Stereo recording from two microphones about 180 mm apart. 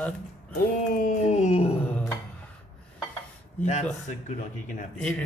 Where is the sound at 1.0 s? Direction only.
40° left (ahead or behind).